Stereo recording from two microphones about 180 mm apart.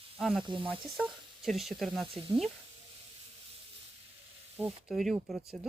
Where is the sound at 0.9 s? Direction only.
Centre (ahead or behind).